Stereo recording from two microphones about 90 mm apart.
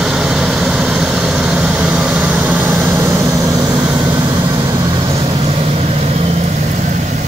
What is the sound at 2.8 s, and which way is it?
Vehicle, 40° right (ahead or behind).